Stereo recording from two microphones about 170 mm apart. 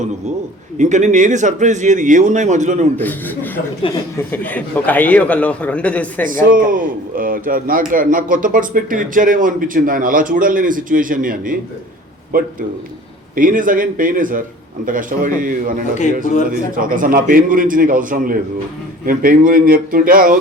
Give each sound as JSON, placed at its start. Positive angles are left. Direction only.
{"t": 0.8, "sound": "a man's voice", "side_deg": -45}
{"t": 2.9, "sound": "a man's voice", "side_deg": 10}
{"t": 6.5, "sound": "a man's voice", "side_deg": -55}